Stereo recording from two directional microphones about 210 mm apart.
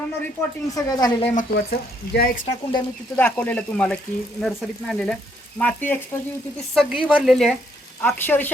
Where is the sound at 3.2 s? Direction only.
10° left (ahead or behind).